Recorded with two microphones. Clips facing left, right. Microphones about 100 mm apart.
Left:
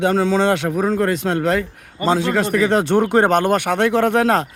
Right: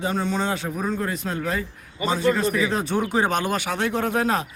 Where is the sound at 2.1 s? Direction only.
85° left.